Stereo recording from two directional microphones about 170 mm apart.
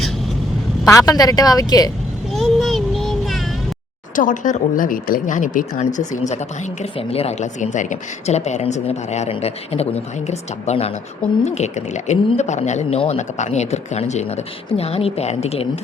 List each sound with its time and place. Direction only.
0.9 s speech: 20° left (ahead or behind)
2.3 s a sound: centre (ahead or behind)
4.1 s speech: 50° left (ahead or behind)
7.1 s speech: 35° left (ahead or behind)